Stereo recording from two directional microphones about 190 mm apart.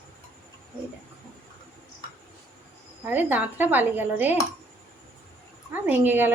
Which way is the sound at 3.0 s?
10° right (ahead or behind).